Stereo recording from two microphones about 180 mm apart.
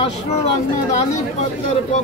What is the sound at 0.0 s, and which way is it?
Speech, 35° left (ahead or behind).